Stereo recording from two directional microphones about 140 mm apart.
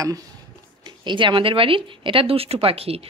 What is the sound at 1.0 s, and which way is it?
Speech, 35° right (ahead or behind).